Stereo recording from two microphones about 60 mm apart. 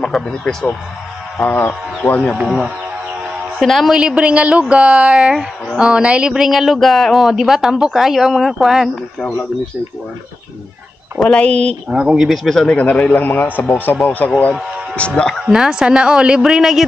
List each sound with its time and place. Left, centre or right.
0.0 s speech: centre
1.4 s a sound: left
2.0 s speech: left
2.4 s speech: centre
3.9 s speech: centre
5.1 s speech: centre
6.3 s speech: centre
11.1 s speech: centre
11.9 s speech: centre
12.6 s a man's voice: left
15.0 s a man's voice: centre
15.4 s speech: centre